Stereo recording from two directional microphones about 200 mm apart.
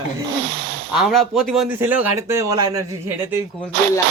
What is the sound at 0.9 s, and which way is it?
Speech, centre (ahead or behind).